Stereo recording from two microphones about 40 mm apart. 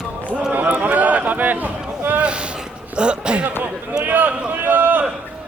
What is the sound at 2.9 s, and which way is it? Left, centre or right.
Speech, right.